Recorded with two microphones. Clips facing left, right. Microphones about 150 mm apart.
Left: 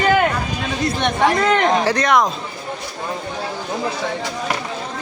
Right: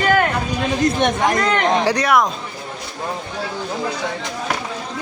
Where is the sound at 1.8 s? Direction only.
15° right (ahead or behind).